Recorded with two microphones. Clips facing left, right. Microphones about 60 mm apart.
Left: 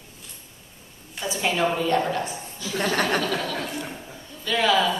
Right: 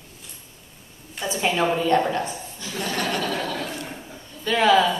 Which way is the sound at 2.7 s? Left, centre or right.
Left.